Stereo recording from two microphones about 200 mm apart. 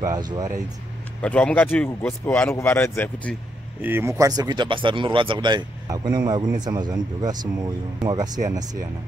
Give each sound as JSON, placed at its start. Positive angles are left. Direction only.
{"t": 0.0, "sound": "speech", "side_deg": -20}
{"t": 1.2, "sound": "speech", "side_deg": 5}
{"t": 3.8, "sound": "speech", "side_deg": -10}